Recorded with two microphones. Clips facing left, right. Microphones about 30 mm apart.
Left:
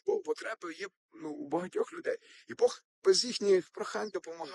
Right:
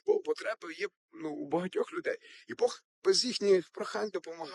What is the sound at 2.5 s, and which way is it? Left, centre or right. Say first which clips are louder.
Speech: even; right.